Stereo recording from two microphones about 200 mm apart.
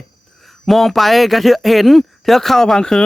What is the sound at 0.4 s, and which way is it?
Speech, centre (ahead or behind).